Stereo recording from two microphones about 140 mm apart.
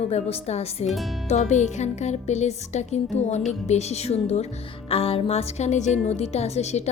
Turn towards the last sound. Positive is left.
turn(degrees=50)  # may be behind; listen again after turning